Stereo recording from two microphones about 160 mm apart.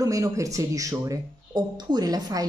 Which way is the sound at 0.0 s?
20° right (ahead or behind).